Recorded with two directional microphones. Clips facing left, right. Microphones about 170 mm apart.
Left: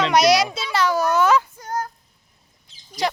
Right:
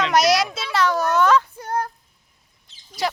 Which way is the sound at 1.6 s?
60° right (ahead or behind).